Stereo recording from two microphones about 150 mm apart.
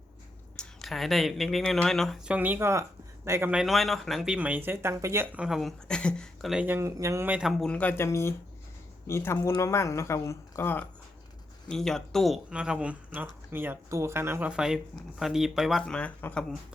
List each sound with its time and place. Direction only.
0.5 s speech: 5° left (ahead or behind)
2.3 s speech: 10° right (ahead or behind)
3.5 s speech: centre (ahead or behind); by 10.8 s 15° left (ahead or behind)
11.7 s speech: 5° left (ahead or behind)